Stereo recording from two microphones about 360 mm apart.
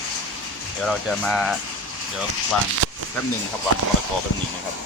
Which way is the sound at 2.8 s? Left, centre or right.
Right.